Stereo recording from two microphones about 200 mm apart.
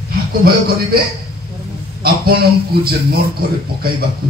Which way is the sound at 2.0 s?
50° right (ahead or behind).